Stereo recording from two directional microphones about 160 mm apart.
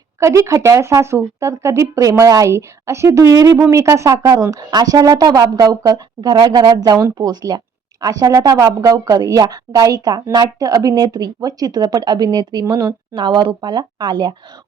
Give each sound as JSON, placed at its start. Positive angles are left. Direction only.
{"t": 0.2, "sound": "speech", "side_deg": -20}